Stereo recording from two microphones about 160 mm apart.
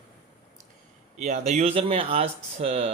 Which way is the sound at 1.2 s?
45° right (ahead or behind).